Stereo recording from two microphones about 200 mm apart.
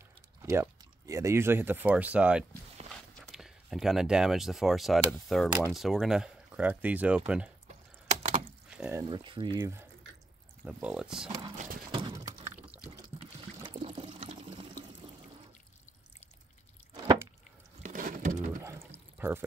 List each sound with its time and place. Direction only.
0.4 s speech: 15° right (ahead or behind)
8.2 s a sound: 30° right (ahead or behind)
8.6 s a sound: 5° right (ahead or behind)
9.0 s speech: 25° right (ahead or behind)
9.6 s speech: 10° right (ahead or behind)
11.2 s speech: 25° right (ahead or behind)
11.5 s clip-clop: 40° right (ahead or behind)
12.1 s a sound: 20° right (ahead or behind)
12.7 s liquid: 5° right (ahead or behind)
13.2 s water: 25° right (ahead or behind)
17.8 s a sound: 40° right (ahead or behind)
18.6 s pour: 15° right (ahead or behind)